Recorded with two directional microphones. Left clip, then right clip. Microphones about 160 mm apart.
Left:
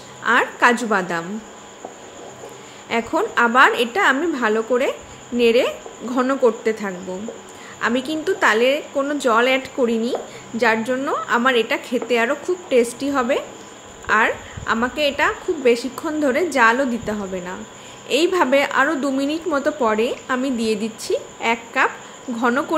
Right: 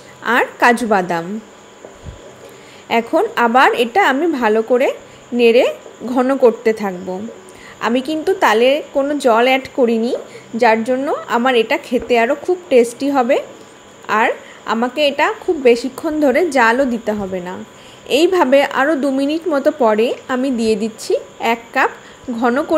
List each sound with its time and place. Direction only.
0.2 s a woman's voice: 25° right (ahead or behind)
2.9 s a woman's voice: 25° right (ahead or behind)